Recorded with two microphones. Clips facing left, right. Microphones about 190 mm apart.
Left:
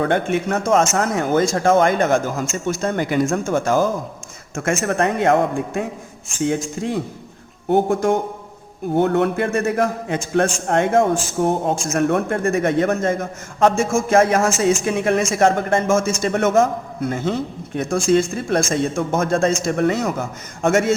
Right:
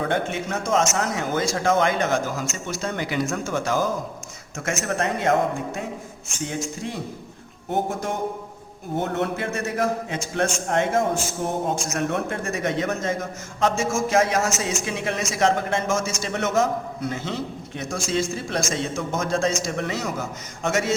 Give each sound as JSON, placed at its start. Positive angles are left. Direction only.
{"t": 0.0, "sound": "a man's voice", "side_deg": 55}
{"t": 6.8, "sound": "a man's voice", "side_deg": 55}